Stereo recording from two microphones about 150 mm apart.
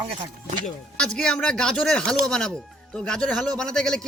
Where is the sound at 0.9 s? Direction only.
5° left (ahead or behind).